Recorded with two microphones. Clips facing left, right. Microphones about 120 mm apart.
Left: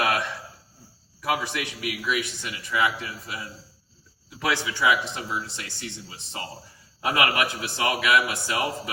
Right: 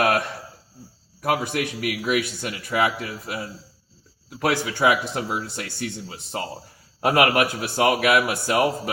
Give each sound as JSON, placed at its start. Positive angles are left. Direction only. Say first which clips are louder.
{"t": 0.0, "sound": "a sound", "louder": "right 4 dB", "side_deg": -50}
{"t": 1.2, "sound": "a man's voice", "louder": "right 4 dB", "side_deg": -50}
{"t": 2.8, "sound": "speech", "louder": "right 1 dB", "side_deg": -40}
{"t": 3.2, "sound": "a man's voice", "louder": "right 5 dB", "side_deg": -60}